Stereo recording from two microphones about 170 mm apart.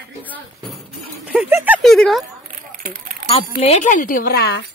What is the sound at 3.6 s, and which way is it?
Speech, 40° left (ahead or behind).